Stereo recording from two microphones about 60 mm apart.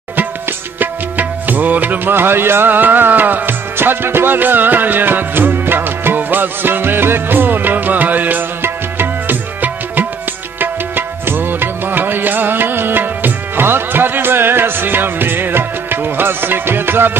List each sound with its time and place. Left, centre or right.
0.7 s music: right